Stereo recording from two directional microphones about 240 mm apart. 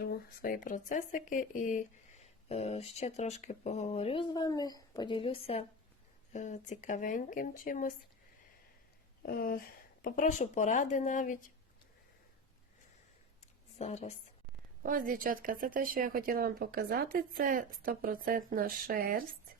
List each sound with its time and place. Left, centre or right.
0.0 s speech: left
9.2 s speech: left
13.7 s speech: left
14.8 s speech: right